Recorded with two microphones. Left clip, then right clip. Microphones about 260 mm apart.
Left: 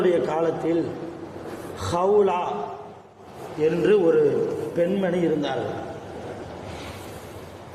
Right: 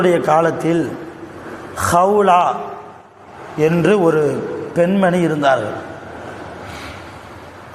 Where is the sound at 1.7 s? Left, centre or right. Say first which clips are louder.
Right 7 dB; right.